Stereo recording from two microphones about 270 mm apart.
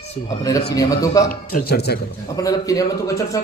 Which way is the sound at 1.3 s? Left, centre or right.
Left.